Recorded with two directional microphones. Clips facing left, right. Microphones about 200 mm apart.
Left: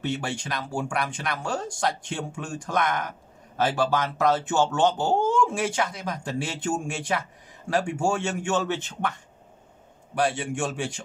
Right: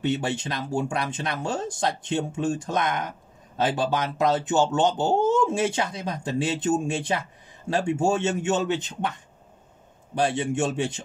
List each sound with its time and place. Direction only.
0.0 s speech: 20° right (ahead or behind)
10.1 s speech: 25° right (ahead or behind)